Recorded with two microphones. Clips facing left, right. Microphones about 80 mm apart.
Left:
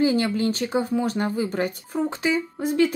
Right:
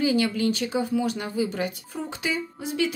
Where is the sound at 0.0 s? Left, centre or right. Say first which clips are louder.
Left 2 dB; left.